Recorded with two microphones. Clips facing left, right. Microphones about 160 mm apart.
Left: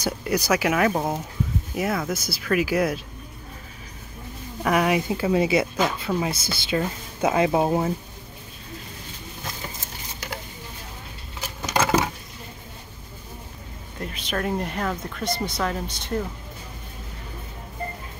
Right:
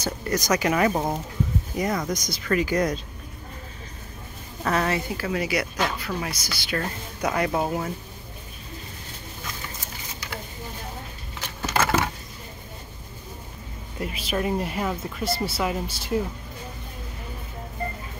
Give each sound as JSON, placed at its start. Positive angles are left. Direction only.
{"t": 0.0, "sound": "speech", "side_deg": 10}
{"t": 4.6, "sound": "speech", "side_deg": 10}
{"t": 11.4, "sound": "a sound", "side_deg": 15}
{"t": 13.9, "sound": "speech", "side_deg": -5}